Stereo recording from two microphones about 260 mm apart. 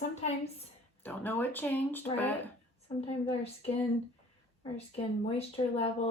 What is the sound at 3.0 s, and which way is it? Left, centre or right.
Speech, left.